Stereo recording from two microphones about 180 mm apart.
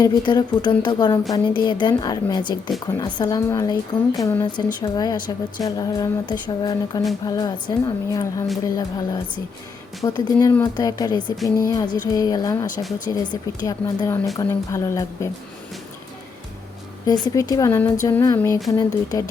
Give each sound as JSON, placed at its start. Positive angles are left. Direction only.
{"t": 0.0, "sound": "a woman's voice", "side_deg": 25}
{"t": 17.1, "sound": "a woman's voice", "side_deg": 20}